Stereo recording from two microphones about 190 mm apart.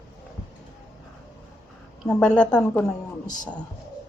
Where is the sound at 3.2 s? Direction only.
40° left (ahead or behind).